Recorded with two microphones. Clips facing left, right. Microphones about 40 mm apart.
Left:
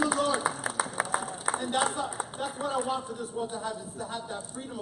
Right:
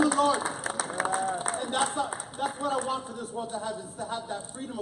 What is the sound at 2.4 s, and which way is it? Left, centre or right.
Speech, centre.